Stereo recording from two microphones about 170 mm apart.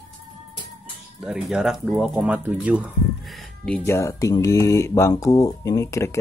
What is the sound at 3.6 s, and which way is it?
Speech, 10° left (ahead or behind).